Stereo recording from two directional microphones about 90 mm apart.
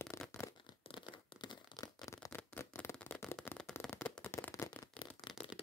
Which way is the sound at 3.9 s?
20° left (ahead or behind).